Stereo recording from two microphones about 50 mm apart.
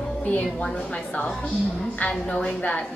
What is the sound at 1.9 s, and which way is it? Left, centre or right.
Speech, left.